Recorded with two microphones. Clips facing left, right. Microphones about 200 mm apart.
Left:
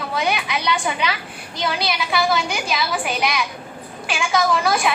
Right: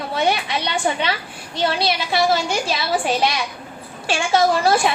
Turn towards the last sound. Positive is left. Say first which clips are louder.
# right 3 dB
turn(degrees=-30)  # may be behind; listen again after turning